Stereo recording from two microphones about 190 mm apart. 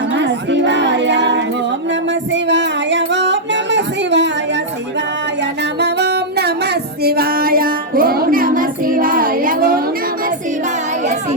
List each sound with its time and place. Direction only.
0.1 s music: 65° right (ahead or behind); by 9.8 s 50° right (ahead or behind)
11.0 s child singing: 35° right (ahead or behind)